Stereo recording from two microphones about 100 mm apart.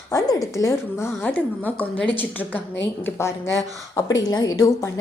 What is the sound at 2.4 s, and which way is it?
A woman's voice, 25° left (ahead or behind).